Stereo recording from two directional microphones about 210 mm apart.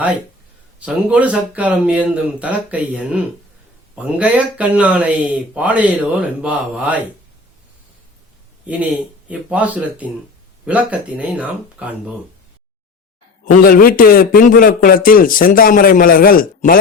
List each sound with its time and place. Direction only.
0.8 s speech: 5° right (ahead or behind)
9.3 s speech: 5° right (ahead or behind)
13.4 s a man's voice: 40° left (ahead or behind)